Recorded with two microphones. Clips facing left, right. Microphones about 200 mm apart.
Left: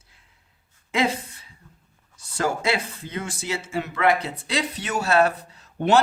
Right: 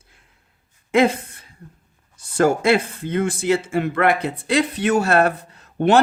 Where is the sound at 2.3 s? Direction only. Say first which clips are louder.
Right 8 dB; 50° right (ahead or behind).